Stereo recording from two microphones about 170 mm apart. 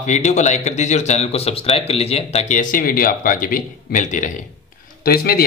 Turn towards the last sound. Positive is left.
turn(degrees=60)  # may be behind; listen again after turning